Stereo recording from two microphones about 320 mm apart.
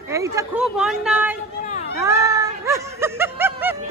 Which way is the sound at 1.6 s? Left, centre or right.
Left.